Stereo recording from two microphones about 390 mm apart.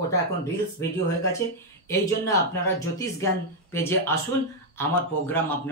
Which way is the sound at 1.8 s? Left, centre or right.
Centre.